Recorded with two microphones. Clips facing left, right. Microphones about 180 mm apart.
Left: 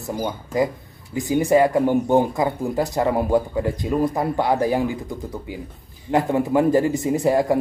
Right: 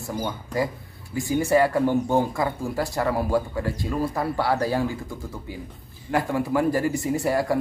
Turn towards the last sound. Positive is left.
turn(degrees=20)  # may be behind; listen again after turning